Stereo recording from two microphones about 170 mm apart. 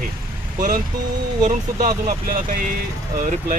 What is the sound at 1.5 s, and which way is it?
Speech, 50° right (ahead or behind).